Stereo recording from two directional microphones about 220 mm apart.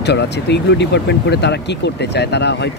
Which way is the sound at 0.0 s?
50° left (ahead or behind).